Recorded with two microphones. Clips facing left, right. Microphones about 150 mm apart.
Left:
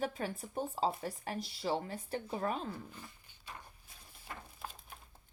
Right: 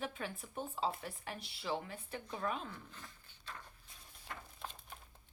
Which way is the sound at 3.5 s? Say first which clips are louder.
Left 1 dB; 10° left (ahead or behind).